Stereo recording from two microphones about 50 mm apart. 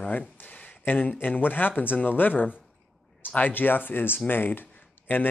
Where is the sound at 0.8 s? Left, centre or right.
Left.